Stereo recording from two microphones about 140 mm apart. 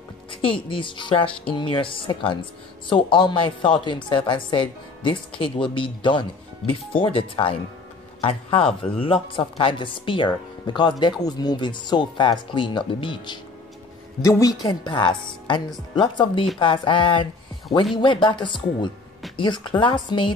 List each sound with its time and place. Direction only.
0.3 s speech: 40° left (ahead or behind)